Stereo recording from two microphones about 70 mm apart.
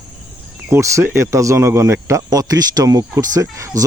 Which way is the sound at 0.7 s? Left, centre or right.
Right.